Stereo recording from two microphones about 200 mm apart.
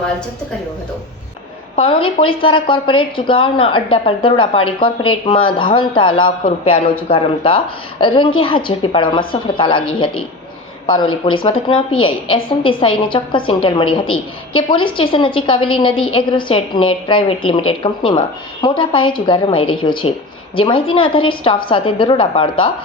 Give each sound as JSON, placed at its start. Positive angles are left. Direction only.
{"t": 1.7, "sound": "a woman's voice", "side_deg": 30}
{"t": 10.8, "sound": "a woman's voice", "side_deg": 25}